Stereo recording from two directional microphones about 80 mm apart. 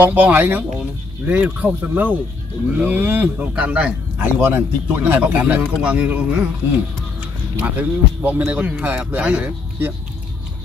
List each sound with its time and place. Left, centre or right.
0.0 s speech: right
3.3 s a man's voice: centre
4.4 s speech: right
7.5 s speech: right